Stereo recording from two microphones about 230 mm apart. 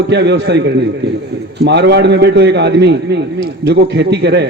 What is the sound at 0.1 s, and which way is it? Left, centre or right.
Speech, right.